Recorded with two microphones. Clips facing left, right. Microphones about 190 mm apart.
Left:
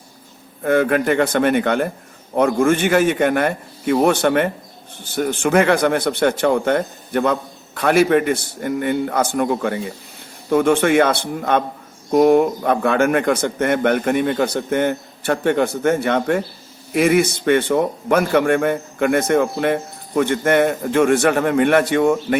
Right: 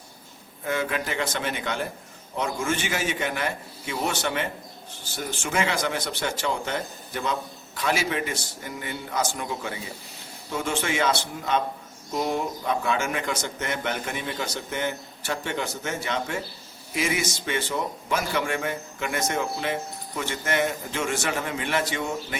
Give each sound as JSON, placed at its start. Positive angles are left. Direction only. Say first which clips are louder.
{"t": 0.6, "sound": "a man's voice", "louder": "left 11 dB", "side_deg": 55}